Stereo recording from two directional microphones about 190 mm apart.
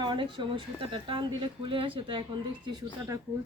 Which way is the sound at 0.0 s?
25° right (ahead or behind).